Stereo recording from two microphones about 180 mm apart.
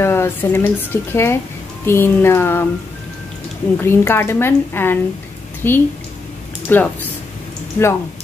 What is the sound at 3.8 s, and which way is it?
A woman's voice, 15° left (ahead or behind).